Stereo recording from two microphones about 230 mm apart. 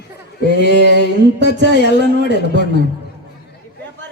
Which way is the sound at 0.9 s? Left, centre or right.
Left.